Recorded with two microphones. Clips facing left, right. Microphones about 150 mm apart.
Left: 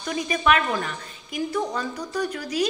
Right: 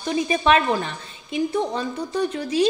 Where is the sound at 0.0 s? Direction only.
30° right (ahead or behind).